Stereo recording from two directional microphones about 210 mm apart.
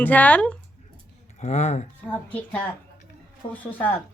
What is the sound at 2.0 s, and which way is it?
Speech, 5° left (ahead or behind).